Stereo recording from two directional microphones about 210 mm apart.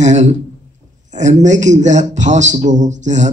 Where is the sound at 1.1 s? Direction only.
35° right (ahead or behind).